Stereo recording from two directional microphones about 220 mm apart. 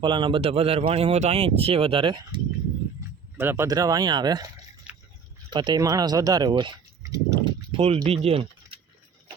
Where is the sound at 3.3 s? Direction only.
10° right (ahead or behind).